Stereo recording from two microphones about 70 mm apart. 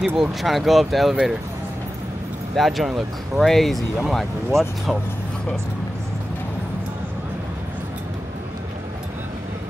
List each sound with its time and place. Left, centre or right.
0.0 s speech: centre
2.5 s speech: centre